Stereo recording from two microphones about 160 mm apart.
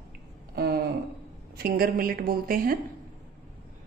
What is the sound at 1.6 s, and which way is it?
A woman's voice, 70° right (ahead or behind).